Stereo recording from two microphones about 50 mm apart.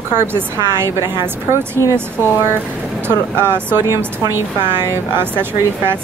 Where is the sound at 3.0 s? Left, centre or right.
Right.